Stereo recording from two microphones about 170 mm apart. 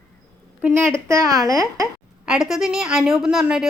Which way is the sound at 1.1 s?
20° right (ahead or behind).